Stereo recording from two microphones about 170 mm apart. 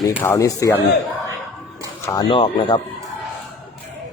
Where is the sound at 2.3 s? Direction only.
30° left (ahead or behind).